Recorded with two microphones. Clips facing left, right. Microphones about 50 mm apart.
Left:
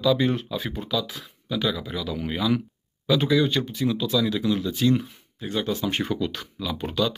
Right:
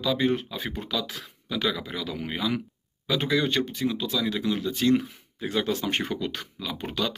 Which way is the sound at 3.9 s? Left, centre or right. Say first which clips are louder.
Left 4 dB; right.